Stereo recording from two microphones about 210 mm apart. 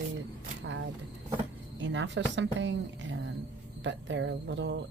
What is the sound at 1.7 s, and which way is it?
Speech, 60° right (ahead or behind).